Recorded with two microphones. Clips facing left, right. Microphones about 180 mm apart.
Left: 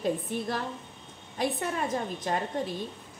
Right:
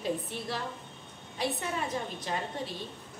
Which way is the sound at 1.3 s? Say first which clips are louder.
Left 3 dB; 50° left (ahead or behind).